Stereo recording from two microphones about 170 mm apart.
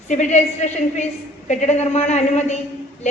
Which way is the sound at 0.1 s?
45° left (ahead or behind).